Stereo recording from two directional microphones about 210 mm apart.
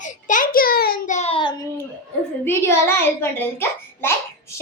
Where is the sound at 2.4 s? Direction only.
10° left (ahead or behind).